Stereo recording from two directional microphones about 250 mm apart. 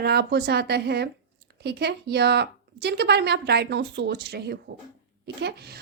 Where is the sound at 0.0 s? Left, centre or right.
Right.